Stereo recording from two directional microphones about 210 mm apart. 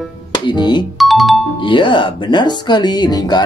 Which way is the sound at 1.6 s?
25° left (ahead or behind).